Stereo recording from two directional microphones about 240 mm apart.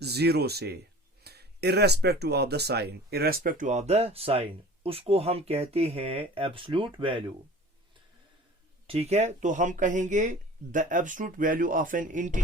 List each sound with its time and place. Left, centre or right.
0.0 s speech: right
8.9 s speech: right